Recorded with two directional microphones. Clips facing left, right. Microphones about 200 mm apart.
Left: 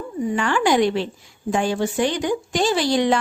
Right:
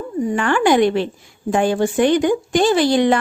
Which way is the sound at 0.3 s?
55° right (ahead or behind).